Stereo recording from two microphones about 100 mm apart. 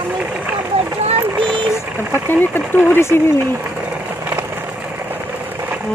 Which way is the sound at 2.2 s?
20° left (ahead or behind).